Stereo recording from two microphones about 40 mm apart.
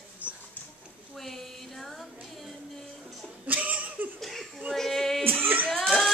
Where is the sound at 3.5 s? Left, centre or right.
Right.